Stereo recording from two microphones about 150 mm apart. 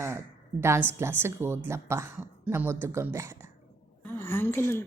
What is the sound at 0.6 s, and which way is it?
A woman's voice, 15° right (ahead or behind).